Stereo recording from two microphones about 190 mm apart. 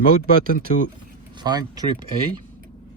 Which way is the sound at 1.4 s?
20° right (ahead or behind).